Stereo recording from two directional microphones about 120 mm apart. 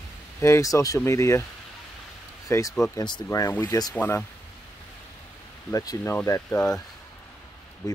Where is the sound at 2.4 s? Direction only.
30° left (ahead or behind).